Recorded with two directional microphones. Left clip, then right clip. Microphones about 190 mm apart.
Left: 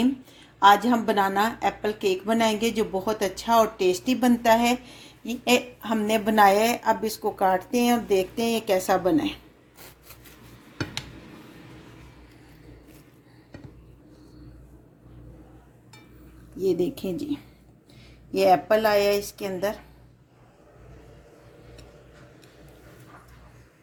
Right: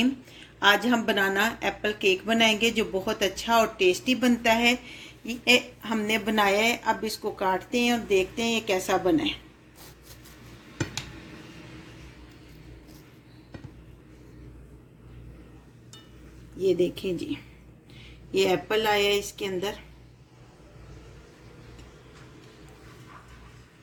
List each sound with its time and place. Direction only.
0.0 s a woman's voice: 30° left (ahead or behind)
16.6 s speech: 40° left (ahead or behind)